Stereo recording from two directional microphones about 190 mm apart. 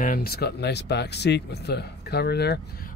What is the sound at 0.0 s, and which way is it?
Speech, 50° left (ahead or behind).